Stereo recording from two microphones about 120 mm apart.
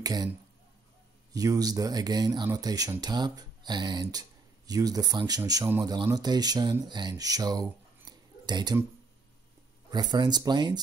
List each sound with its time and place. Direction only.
0.0 s speech: 30° right (ahead or behind)
1.3 s speech: 30° right (ahead or behind)
9.8 s speech: 35° right (ahead or behind)